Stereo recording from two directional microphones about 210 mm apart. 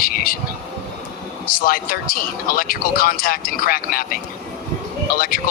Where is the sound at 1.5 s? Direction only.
45° left (ahead or behind).